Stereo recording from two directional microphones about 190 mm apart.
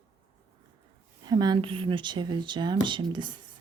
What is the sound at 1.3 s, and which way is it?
Speech, 20° right (ahead or behind).